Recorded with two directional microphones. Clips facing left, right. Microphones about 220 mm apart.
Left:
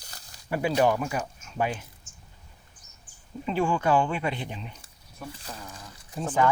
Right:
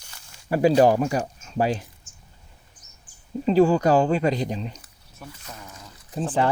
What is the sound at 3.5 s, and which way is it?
Speech, 40° right (ahead or behind).